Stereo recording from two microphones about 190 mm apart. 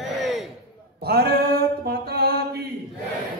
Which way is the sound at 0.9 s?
55° right (ahead or behind).